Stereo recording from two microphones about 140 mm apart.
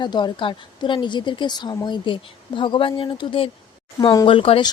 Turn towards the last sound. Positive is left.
turn(degrees=40)  # may be behind; listen again after turning